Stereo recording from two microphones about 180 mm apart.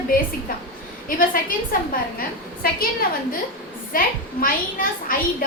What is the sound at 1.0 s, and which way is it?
A woman's voice, 50° left (ahead or behind).